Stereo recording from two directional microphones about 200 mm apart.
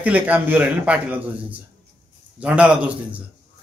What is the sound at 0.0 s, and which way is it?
Speech, 5° right (ahead or behind).